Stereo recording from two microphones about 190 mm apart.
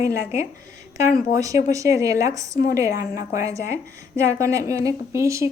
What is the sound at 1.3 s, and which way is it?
A woman's voice, 15° right (ahead or behind).